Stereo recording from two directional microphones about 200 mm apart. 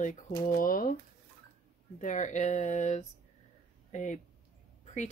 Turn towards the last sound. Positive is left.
turn(degrees=35)  # may be behind; listen again after turning